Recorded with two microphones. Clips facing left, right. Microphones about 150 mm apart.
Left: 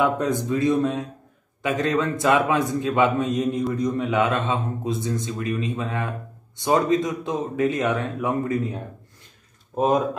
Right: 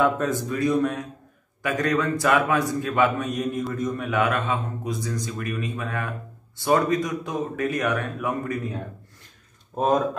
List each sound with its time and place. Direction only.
0.0 s speech: 20° left (ahead or behind)
9.8 s speech: 15° left (ahead or behind)